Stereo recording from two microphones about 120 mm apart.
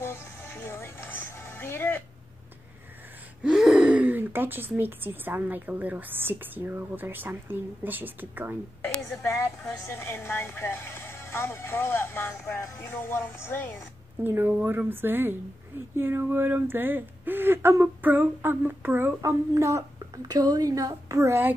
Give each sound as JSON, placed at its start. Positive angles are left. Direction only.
{"t": 0.0, "sound": "music", "side_deg": 20}
{"t": 3.4, "sound": "speech", "side_deg": -5}
{"t": 9.2, "sound": "speech", "side_deg": 25}
{"t": 14.2, "sound": "speech", "side_deg": -15}